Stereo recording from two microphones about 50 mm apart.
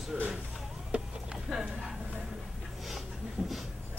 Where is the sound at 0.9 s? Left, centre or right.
Right.